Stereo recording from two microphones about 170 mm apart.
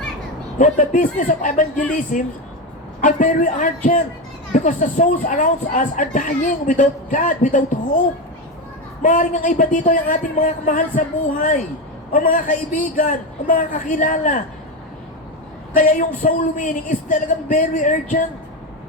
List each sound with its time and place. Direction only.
0.6 s speech: 50° left (ahead or behind)
9.0 s speech: 50° left (ahead or behind)
15.7 s speech: 50° left (ahead or behind)